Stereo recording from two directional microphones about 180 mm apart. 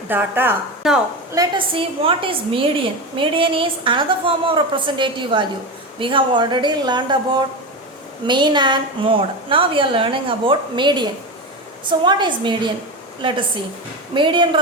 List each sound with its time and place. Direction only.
0.1 s a woman's voice: 10° right (ahead or behind)
1.3 s a woman's voice: 25° right (ahead or behind)
14.1 s a woman's voice: 25° right (ahead or behind)